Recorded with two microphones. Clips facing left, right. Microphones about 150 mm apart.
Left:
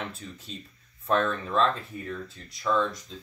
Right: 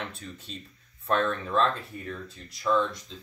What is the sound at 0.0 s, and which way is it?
Speech, centre (ahead or behind).